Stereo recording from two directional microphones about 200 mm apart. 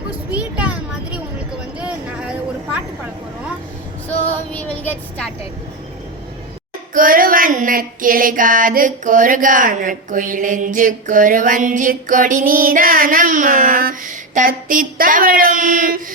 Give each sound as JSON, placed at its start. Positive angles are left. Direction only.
{"t": 0.3, "sound": "a sound", "side_deg": -5}
{"t": 2.7, "sound": "vehicle", "side_deg": -5}
{"t": 4.5, "sound": "a woman's voice", "side_deg": 5}
{"t": 6.9, "sound": "female singing", "side_deg": -45}